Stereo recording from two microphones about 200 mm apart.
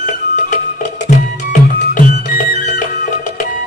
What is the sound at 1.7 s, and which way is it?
Music, 40° left (ahead or behind).